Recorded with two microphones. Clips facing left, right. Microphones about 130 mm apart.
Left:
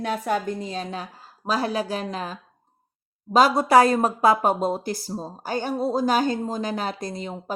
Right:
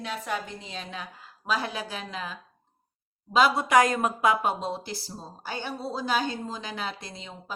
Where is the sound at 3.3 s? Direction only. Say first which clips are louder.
Left 4 dB; 40° left (ahead or behind).